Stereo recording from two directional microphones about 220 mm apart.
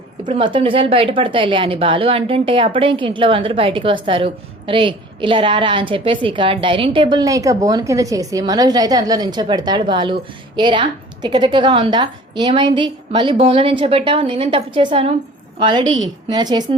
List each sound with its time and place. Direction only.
0.3 s a woman's voice: 20° right (ahead or behind)